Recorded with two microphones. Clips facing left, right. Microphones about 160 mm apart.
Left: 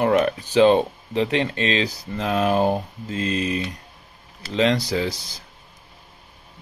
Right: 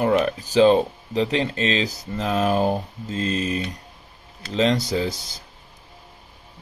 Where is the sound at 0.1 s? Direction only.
35° right (ahead or behind).